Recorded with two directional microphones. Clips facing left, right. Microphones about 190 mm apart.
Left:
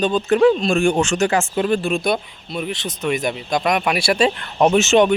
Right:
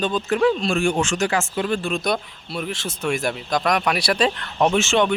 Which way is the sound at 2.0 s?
5° left (ahead or behind).